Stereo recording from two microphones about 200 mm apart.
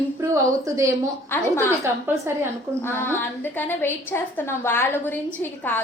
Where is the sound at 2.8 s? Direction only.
10° left (ahead or behind).